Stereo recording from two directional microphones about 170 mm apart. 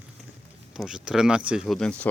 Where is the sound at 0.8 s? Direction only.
5° right (ahead or behind).